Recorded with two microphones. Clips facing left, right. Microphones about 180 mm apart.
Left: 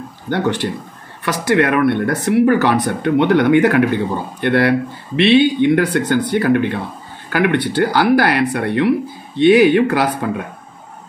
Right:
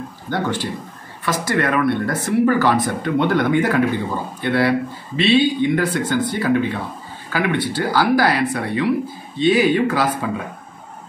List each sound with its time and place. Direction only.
0.3 s speech: 70° left (ahead or behind)